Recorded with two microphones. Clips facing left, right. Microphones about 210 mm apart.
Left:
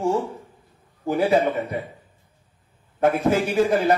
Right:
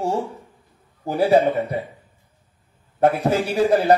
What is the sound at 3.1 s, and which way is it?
Speech, 35° right (ahead or behind).